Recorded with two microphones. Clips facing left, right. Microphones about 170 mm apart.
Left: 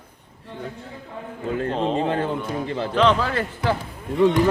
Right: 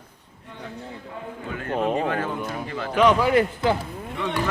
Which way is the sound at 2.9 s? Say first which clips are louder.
Right 3 dB; 10° right (ahead or behind).